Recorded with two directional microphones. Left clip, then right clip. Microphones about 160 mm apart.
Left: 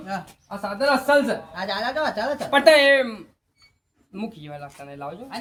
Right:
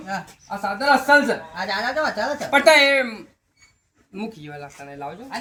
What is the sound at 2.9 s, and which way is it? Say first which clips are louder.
Speech: even; 10° left (ahead or behind).